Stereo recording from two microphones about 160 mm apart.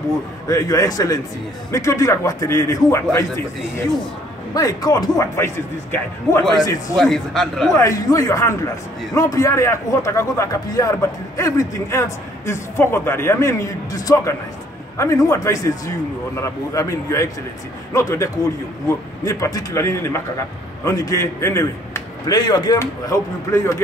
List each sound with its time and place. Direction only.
0.5 s a man's voice: 20° left (ahead or behind)
7.0 s speech: centre (ahead or behind)
7.7 s a man's voice: 20° left (ahead or behind)